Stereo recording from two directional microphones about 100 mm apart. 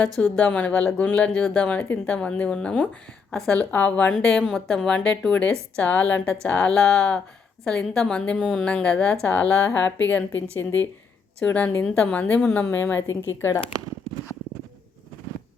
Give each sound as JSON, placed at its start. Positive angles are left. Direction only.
{"t": 0.2, "sound": "speech", "side_deg": 15}
{"t": 4.1, "sound": "speech", "side_deg": 5}
{"t": 11.4, "sound": "a woman's voice", "side_deg": 15}